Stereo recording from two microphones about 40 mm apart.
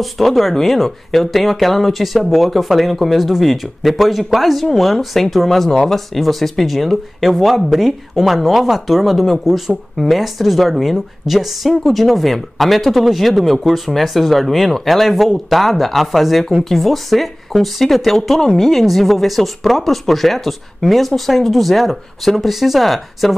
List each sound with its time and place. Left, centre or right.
0.0 s speech: centre